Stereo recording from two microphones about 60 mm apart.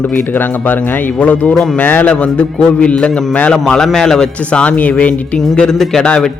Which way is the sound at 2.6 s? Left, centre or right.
Centre.